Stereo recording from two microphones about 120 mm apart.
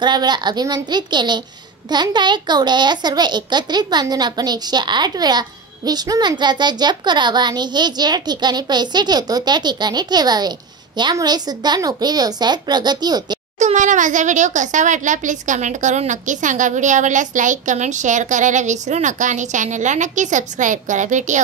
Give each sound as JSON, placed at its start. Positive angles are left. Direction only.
{"t": 0.0, "sound": "a child's voice", "side_deg": -35}
{"t": 13.6, "sound": "a child's voice", "side_deg": -85}